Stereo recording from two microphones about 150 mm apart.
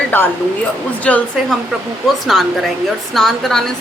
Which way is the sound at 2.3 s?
Centre (ahead or behind).